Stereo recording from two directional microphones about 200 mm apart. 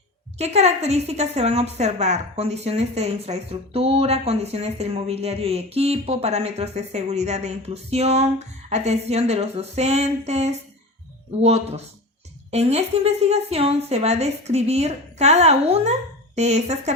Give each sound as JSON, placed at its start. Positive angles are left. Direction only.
{"t": 0.3, "sound": "a woman's voice", "side_deg": -30}